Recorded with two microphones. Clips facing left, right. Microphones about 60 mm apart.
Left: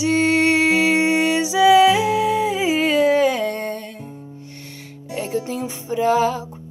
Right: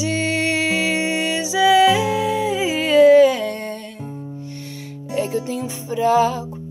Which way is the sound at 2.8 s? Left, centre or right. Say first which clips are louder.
Right 7 dB; centre.